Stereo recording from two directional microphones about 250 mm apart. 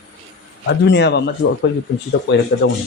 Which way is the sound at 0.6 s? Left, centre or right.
Left.